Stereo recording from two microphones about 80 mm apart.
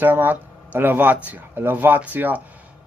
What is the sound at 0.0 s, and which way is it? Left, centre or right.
Speech, right.